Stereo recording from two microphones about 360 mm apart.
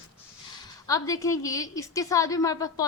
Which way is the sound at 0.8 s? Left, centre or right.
Centre.